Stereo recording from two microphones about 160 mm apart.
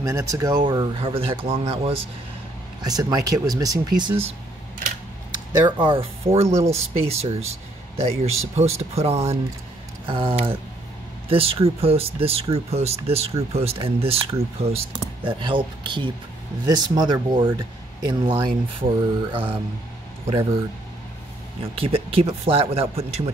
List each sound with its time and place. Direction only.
0.0 s speech: 20° right (ahead or behind); by 2.0 s 35° right (ahead or behind)
2.8 s speech: 25° right (ahead or behind)
5.7 s speech: 30° right (ahead or behind)
6.4 s speech: 15° right (ahead or behind)
6.9 s speech: 40° right (ahead or behind)
21.7 s speech: 35° right (ahead or behind)